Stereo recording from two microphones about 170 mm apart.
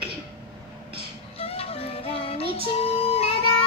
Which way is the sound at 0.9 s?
35° left (ahead or behind).